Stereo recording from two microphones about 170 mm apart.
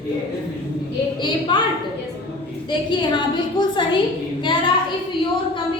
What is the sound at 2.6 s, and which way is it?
A woman's voice, 25° left (ahead or behind).